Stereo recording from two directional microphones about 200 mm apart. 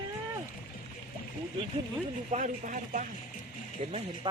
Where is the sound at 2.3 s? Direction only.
40° right (ahead or behind).